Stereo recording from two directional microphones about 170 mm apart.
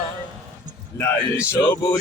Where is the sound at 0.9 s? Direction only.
15° left (ahead or behind).